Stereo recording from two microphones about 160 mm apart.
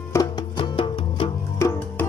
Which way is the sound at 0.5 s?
30° left (ahead or behind).